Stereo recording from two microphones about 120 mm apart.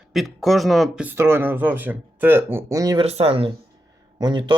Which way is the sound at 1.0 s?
20° right (ahead or behind).